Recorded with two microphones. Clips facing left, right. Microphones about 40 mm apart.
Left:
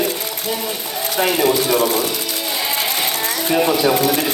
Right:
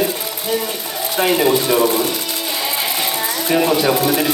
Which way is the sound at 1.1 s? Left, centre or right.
Right.